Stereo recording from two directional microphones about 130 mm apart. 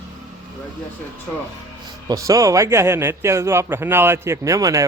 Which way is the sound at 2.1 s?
25° right (ahead or behind).